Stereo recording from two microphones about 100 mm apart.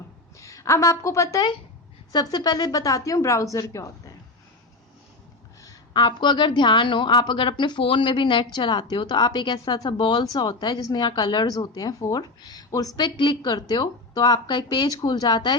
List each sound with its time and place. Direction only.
0.3 s a woman's voice: 30° left (ahead or behind)
5.9 s a woman's voice: 50° left (ahead or behind)
13.1 s a woman's voice: 50° left (ahead or behind)